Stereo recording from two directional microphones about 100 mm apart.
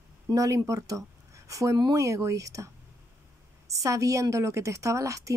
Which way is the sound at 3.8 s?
35° right (ahead or behind).